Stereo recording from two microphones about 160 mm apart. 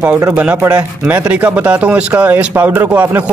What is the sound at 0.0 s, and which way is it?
Speech, 15° right (ahead or behind).